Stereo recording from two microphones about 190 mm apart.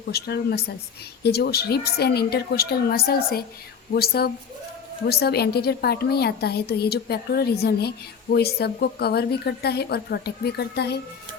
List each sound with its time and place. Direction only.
0.1 s a woman's voice: 55° left (ahead or behind)